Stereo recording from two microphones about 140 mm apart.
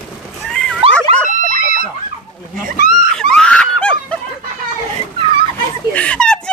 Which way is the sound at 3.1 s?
5° left (ahead or behind).